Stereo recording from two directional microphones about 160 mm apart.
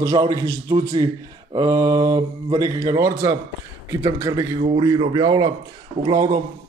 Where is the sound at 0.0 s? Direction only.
25° right (ahead or behind).